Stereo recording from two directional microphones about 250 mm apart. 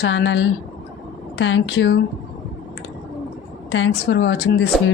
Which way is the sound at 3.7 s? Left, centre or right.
Left.